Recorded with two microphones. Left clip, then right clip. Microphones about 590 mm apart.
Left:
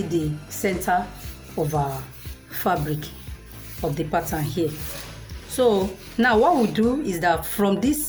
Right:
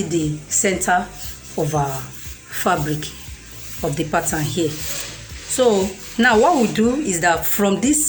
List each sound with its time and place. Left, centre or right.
0.1 s speech: left